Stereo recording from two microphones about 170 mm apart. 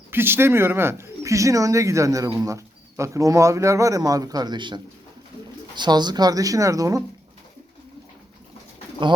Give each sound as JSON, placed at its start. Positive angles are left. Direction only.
{"t": 0.1, "sound": "speech", "side_deg": -15}